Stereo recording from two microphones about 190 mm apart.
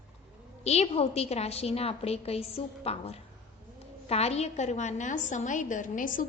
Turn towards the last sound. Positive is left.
turn(degrees=45)  # may be behind; listen again after turning